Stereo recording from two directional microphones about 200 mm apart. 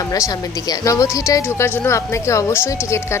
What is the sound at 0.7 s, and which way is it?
Speech, 15° left (ahead or behind).